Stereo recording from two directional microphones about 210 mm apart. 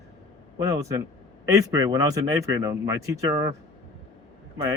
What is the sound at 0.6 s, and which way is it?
Speech, 15° right (ahead or behind).